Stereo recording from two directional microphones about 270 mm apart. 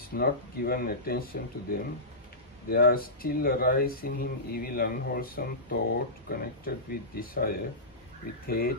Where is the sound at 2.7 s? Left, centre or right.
Left.